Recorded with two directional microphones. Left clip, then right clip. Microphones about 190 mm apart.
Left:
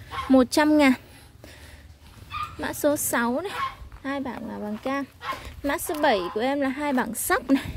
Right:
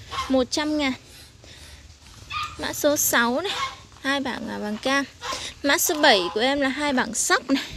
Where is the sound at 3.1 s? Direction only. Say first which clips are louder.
Right 4 dB; centre (ahead or behind).